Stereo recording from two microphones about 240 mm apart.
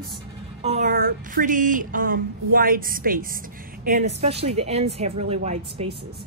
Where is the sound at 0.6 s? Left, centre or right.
Right.